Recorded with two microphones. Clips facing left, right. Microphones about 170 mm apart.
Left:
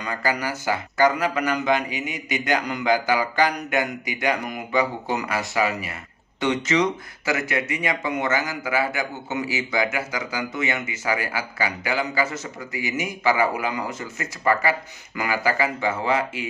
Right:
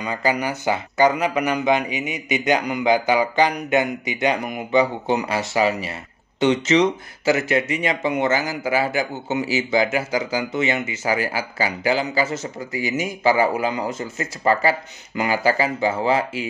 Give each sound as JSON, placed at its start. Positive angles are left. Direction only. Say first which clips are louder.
{"t": 0.0, "sound": "speech", "louder": "right 3 dB", "side_deg": -20}